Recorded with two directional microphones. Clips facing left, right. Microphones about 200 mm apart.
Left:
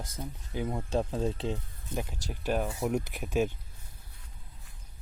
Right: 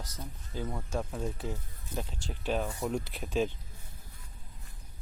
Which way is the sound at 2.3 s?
10° left (ahead or behind).